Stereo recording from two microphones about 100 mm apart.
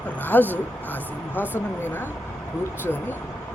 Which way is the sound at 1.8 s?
20° left (ahead or behind).